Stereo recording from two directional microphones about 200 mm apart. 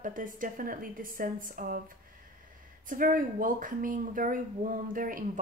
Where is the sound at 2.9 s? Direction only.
45° right (ahead or behind).